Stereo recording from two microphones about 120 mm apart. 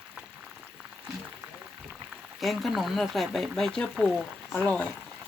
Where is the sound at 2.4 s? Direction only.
Centre (ahead or behind).